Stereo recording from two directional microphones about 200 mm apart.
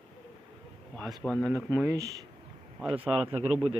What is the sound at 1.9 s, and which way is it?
Speech, 15° right (ahead or behind).